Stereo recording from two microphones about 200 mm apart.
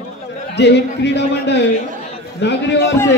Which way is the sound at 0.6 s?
55° left (ahead or behind).